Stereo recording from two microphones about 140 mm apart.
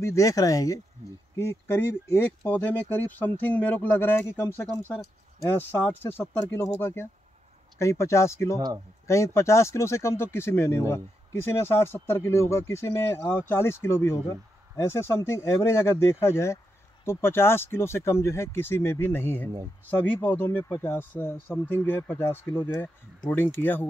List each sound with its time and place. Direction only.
0.0 s speech: 20° left (ahead or behind)
8.5 s speech: 25° right (ahead or behind)
9.0 s speech: 20° left (ahead or behind)